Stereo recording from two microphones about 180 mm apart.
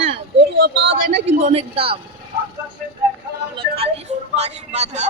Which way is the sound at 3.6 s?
30° right (ahead or behind).